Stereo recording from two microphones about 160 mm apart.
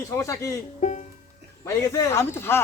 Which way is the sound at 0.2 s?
20° left (ahead or behind).